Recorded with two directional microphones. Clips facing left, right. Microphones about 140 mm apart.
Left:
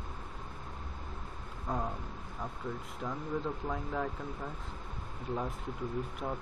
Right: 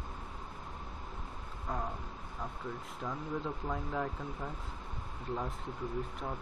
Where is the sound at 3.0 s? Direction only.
Centre (ahead or behind).